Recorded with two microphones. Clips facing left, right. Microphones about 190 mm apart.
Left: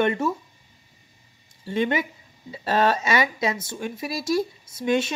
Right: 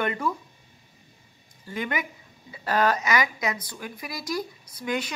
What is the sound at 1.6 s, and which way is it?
A man's voice, 25° left (ahead or behind).